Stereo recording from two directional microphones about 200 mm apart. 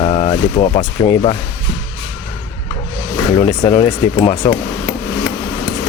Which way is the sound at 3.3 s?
25° left (ahead or behind).